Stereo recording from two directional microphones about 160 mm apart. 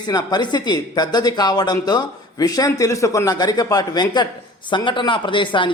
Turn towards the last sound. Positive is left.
turn(degrees=30)  # may be behind; listen again after turning